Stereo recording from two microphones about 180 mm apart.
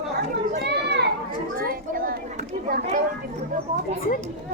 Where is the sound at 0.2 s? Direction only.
65° right (ahead or behind).